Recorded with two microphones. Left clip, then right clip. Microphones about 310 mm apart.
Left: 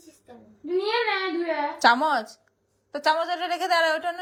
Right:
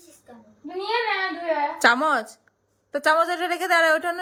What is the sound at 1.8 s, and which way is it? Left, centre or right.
A woman's voice, centre.